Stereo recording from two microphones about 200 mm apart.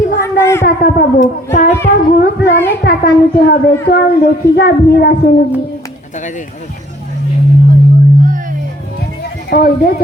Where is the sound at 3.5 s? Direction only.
50° left (ahead or behind).